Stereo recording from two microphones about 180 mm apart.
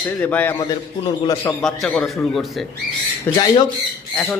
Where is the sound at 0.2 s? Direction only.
10° left (ahead or behind).